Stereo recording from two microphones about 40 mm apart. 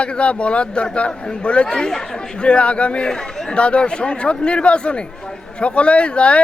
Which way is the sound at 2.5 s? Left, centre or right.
Left.